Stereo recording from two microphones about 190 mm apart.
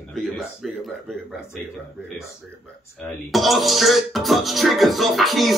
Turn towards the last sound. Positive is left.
turn(degrees=0)  # may be behind; listen again after turning